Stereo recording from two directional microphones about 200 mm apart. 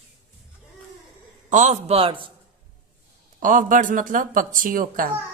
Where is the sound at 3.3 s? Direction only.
40° right (ahead or behind).